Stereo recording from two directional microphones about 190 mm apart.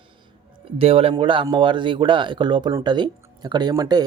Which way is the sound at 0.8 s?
30° right (ahead or behind).